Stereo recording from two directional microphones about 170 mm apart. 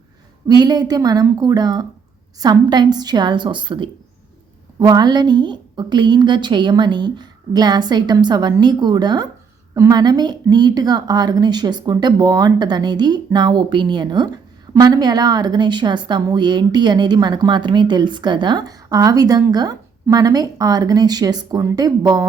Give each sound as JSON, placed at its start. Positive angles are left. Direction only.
{"t": 0.4, "sound": "a woman's voice", "side_deg": -25}